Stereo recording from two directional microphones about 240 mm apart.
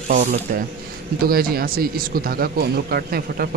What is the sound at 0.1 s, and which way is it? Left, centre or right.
Speech, right.